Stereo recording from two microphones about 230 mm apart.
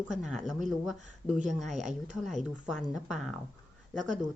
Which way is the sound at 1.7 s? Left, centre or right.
Right.